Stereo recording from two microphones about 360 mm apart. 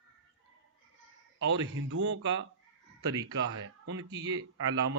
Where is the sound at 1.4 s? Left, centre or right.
Right.